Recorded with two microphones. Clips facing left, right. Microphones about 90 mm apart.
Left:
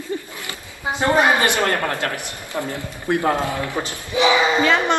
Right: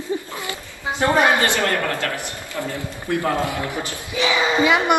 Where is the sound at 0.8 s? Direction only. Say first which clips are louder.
Even; 20° left (ahead or behind).